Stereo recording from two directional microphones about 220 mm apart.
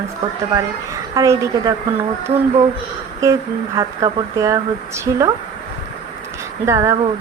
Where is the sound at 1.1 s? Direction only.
15° right (ahead or behind).